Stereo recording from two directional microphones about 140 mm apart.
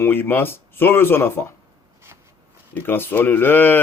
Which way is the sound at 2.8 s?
15° left (ahead or behind).